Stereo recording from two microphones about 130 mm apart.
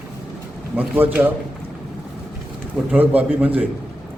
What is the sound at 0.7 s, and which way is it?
Speech, 10° right (ahead or behind).